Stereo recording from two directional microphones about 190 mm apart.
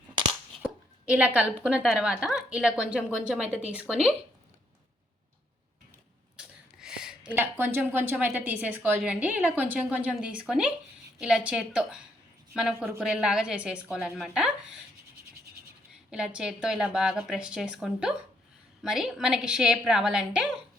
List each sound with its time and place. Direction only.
0.6 s speech: 5° right (ahead or behind)
6.3 s a sound: 5° right (ahead or behind)
7.3 s a woman's voice: 10° right (ahead or behind)
16.0 s speech: 5° right (ahead or behind)